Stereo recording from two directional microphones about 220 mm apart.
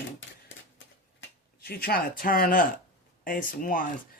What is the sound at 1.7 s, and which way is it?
Speech, 40° left (ahead or behind).